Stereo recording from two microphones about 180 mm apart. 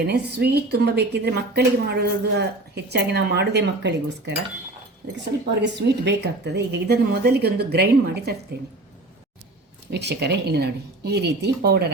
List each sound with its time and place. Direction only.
0.0 s speech: 65° right (ahead or behind)
5.6 s speech: 70° right (ahead or behind)
9.9 s speech: 70° right (ahead or behind)